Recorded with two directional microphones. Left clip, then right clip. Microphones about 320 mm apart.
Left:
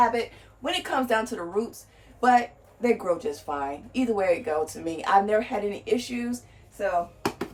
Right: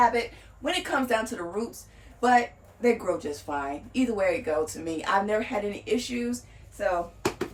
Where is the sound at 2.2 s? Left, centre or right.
Centre.